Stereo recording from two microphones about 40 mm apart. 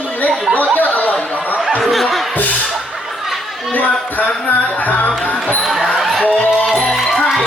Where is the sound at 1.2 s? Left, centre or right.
Left.